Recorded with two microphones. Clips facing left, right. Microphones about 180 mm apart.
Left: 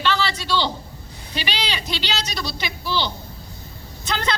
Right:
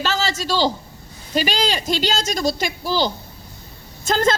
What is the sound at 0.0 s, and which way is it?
A man's voice, 45° right (ahead or behind).